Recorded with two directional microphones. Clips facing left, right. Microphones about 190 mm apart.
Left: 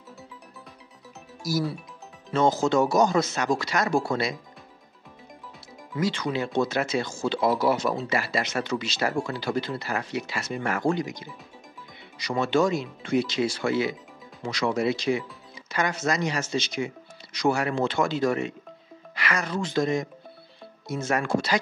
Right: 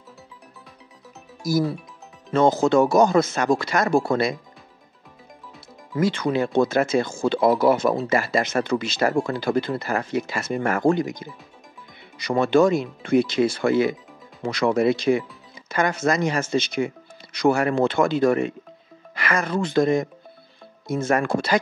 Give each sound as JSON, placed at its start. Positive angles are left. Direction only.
{"t": 1.4, "sound": "speech", "side_deg": -50}
{"t": 5.9, "sound": "speech", "side_deg": -55}